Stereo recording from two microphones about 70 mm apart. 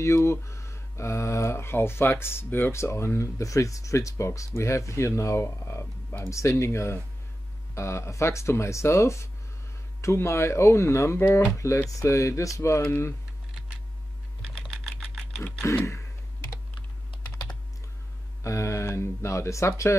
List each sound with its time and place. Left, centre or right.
0.0 s speech: left
14.5 s typing: centre
15.7 s speech: left
18.4 s speech: left